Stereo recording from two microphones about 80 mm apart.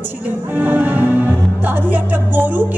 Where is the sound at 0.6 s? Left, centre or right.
Right.